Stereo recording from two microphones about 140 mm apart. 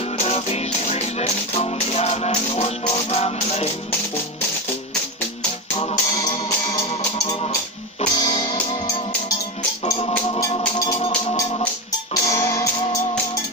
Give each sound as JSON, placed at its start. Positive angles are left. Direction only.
{"t": 0.2, "sound": "music", "side_deg": 50}
{"t": 8.0, "sound": "music", "side_deg": 30}
{"t": 12.1, "sound": "music", "side_deg": 20}